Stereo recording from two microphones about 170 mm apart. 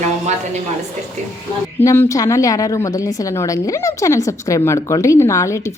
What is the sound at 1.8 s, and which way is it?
A woman's voice, 15° left (ahead or behind).